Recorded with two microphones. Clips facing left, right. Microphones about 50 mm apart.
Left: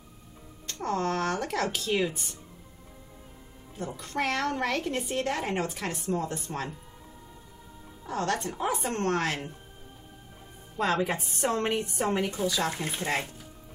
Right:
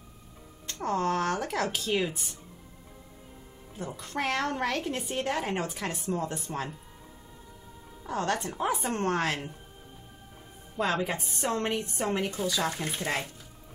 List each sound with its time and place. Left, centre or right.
0.8 s a woman's voice: centre
2.0 s speech: centre
3.7 s a woman's voice: centre
8.1 s a woman's voice: centre
8.5 s a woman's voice: centre
11.1 s speech: centre